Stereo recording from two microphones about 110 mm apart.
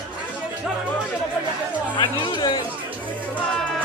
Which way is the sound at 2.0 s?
40° left (ahead or behind).